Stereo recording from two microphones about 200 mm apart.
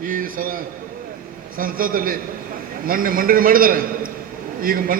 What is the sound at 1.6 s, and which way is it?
A man's voice, 45° right (ahead or behind).